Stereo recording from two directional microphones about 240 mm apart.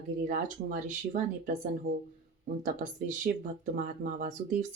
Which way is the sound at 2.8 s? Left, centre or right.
Right.